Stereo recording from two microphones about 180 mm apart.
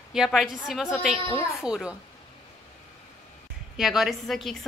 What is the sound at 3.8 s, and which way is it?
Speech, centre (ahead or behind).